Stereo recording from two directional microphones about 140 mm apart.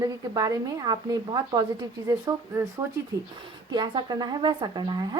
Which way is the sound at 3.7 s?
35° right (ahead or behind).